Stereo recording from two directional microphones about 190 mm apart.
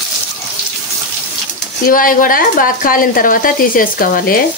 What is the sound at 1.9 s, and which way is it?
Speech, 45° left (ahead or behind).